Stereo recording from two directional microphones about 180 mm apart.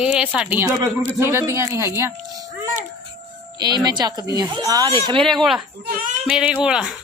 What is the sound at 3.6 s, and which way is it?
Speech, 25° right (ahead or behind).